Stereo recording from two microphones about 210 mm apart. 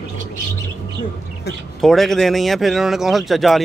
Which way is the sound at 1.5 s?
50° left (ahead or behind).